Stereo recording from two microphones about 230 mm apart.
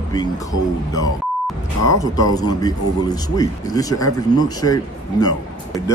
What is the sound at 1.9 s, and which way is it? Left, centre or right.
A man's voice, centre.